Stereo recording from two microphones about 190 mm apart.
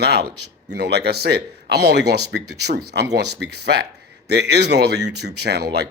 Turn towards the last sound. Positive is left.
turn(degrees=-60)  # may be behind; listen again after turning